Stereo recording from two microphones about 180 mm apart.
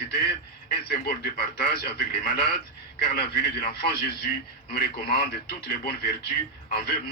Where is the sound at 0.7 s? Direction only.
60° left (ahead or behind).